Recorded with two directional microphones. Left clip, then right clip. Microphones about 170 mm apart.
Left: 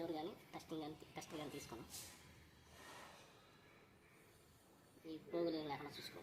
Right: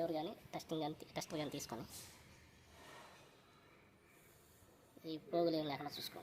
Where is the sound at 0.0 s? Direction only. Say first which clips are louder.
Right 6 dB; 45° right (ahead or behind).